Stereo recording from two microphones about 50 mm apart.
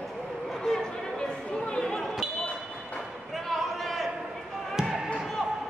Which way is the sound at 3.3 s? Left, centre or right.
Centre.